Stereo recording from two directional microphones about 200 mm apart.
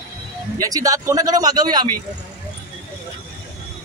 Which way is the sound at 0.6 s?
15° right (ahead or behind).